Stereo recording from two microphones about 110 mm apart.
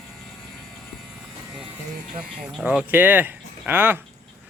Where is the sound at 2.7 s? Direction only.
15° right (ahead or behind).